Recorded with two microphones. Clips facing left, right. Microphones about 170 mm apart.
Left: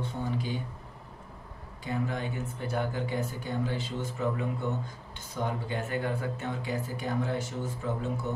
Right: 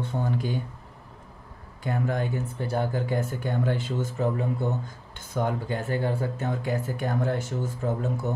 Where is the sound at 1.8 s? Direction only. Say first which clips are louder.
Right 5 dB; 50° right (ahead or behind).